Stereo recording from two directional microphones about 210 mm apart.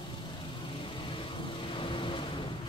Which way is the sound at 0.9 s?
25° left (ahead or behind).